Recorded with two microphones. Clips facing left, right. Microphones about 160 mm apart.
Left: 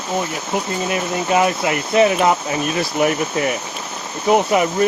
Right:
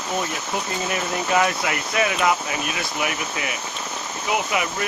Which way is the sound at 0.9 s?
25° left (ahead or behind).